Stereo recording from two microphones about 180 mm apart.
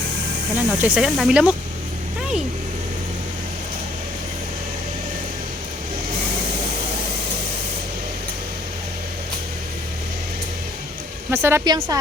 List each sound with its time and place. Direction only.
0.5 s speech: 10° right (ahead or behind)
11.3 s speech: 15° right (ahead or behind)